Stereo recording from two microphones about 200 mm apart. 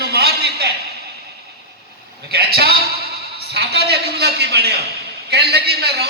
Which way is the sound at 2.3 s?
50° right (ahead or behind).